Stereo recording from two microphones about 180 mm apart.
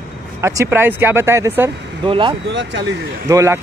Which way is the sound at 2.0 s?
25° right (ahead or behind).